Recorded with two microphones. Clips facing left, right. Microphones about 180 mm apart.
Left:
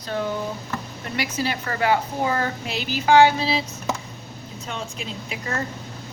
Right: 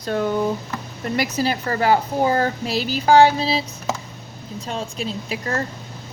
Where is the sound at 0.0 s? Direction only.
50° right (ahead or behind); by 3.6 s 35° right (ahead or behind).